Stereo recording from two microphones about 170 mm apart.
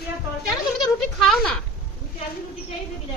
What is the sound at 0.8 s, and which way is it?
Speech, centre (ahead or behind).